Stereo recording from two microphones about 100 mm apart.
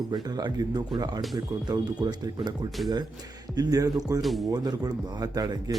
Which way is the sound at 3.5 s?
40° right (ahead or behind).